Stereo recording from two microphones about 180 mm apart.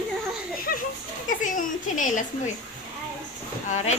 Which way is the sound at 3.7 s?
40° left (ahead or behind).